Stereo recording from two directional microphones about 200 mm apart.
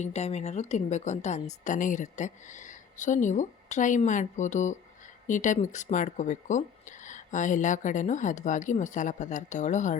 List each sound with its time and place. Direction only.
0.0 s speech: 30° left (ahead or behind)